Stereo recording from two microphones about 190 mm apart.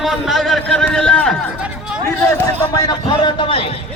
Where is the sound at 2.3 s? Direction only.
20° left (ahead or behind).